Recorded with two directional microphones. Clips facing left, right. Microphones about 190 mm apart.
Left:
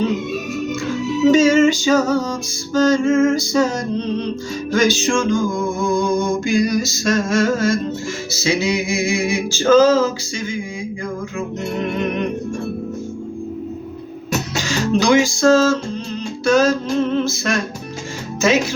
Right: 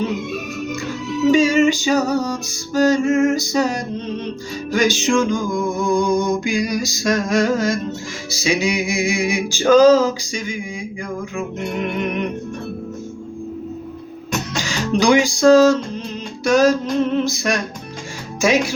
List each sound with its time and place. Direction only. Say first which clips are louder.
0.7 s music: left 4 dB; centre (ahead or behind)
1.4 s music: left 2 dB; 15° right (ahead or behind)
4.7 s music: even; 15° right (ahead or behind)
14.7 s music: even; 15° right (ahead or behind)